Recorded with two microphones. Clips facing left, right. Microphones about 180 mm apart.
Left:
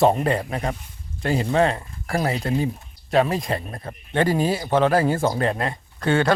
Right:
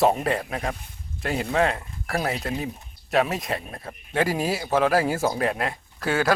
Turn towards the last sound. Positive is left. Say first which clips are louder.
# left 3 dB
turn(degrees=-5)  # may be behind; listen again after turning